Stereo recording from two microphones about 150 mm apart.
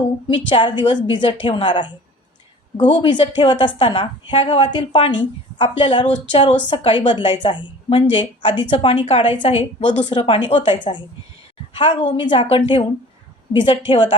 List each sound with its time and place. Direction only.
0.3 s a woman's voice: 35° left (ahead or behind)
3.0 s a woman's voice: 30° left (ahead or behind)